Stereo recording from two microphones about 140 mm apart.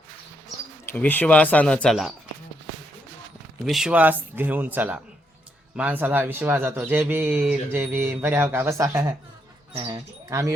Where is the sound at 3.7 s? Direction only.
5° right (ahead or behind).